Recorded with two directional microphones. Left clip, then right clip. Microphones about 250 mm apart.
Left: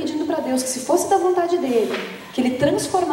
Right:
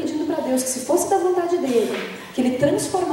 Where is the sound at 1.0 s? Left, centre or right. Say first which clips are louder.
Left 2 dB; centre.